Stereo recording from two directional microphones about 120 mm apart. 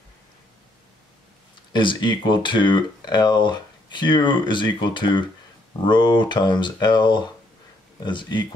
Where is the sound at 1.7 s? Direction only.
40° left (ahead or behind).